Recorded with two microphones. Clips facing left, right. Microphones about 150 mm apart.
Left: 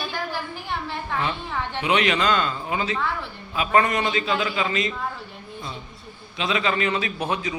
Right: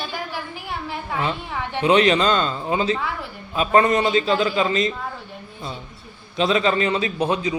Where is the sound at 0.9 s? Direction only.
15° right (ahead or behind).